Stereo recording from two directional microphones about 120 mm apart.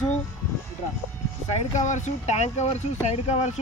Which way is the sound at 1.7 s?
90° left.